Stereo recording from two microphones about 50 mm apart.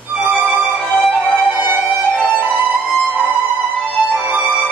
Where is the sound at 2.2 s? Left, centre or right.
Right.